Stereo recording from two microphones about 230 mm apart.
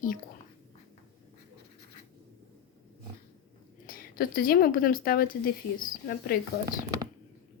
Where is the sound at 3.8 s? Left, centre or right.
Left.